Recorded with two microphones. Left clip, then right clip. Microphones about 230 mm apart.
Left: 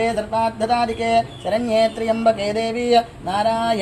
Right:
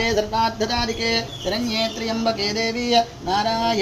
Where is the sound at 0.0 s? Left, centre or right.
Left.